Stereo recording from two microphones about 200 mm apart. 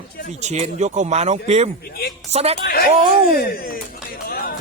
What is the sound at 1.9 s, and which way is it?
Music, 50° left (ahead or behind).